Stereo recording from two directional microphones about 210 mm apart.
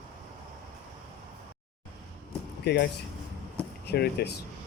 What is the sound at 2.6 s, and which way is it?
Speech, 50° left (ahead or behind).